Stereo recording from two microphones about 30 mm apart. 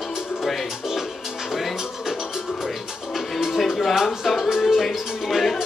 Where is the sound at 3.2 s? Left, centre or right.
Centre.